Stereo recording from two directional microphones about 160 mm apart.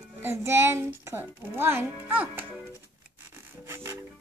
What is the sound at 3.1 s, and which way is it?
Music, 15° right (ahead or behind).